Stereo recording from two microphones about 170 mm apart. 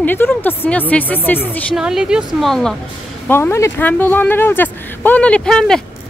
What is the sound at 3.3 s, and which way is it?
Speech, 15° left (ahead or behind).